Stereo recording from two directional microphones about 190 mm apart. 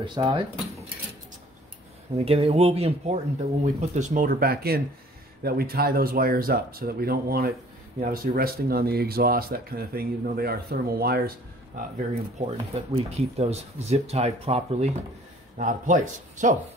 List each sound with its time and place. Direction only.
0.0 s speech: 25° right (ahead or behind)
2.1 s speech: 30° right (ahead or behind); by 11.8 s 55° right (ahead or behind)
12.4 s speech: 35° right (ahead or behind)